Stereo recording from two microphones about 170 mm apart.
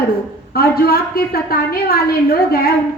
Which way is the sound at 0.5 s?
65° left (ahead or behind).